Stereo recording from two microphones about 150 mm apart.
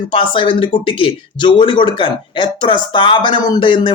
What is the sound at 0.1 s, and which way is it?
Speech, 35° left (ahead or behind).